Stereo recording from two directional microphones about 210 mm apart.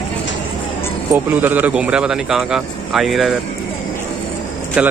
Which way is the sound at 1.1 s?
10° right (ahead or behind).